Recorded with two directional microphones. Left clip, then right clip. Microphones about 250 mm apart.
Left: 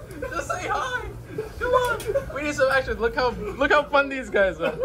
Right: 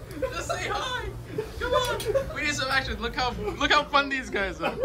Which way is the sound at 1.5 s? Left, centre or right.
Centre.